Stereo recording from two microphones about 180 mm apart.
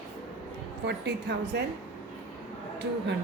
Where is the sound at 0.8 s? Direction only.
70° right (ahead or behind).